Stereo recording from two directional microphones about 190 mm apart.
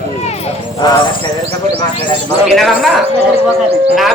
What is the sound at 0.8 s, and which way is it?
Speech, 20° left (ahead or behind).